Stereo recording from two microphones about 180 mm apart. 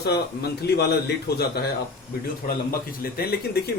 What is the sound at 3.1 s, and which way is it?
Speech, 60° left (ahead or behind).